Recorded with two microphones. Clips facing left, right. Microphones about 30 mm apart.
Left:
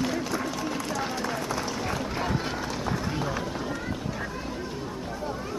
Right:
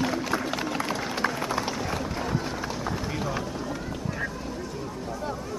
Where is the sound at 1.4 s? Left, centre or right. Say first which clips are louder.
Right 2 dB; centre.